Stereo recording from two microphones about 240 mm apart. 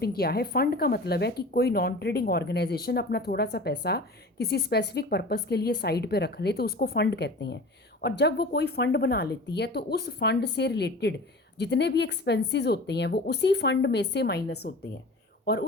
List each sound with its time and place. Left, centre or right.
0.0 s a woman's voice: left